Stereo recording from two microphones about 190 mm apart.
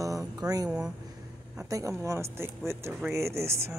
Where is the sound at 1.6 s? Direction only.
15° right (ahead or behind).